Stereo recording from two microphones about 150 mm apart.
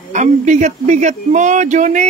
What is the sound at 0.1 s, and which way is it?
Speech, 55° right (ahead or behind).